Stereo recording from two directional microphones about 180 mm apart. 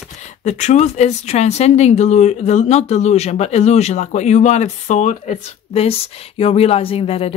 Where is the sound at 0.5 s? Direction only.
40° left (ahead or behind).